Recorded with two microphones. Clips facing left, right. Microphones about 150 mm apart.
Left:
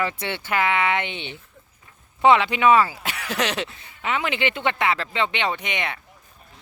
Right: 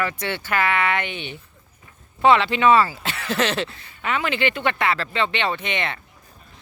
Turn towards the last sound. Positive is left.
turn(degrees=15)  # may be behind; listen again after turning